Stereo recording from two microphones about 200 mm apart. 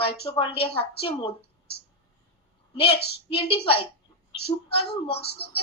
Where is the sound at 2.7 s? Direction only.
25° left (ahead or behind).